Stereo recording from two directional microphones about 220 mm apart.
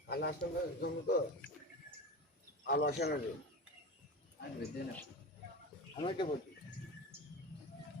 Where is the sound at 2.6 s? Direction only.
45° left (ahead or behind).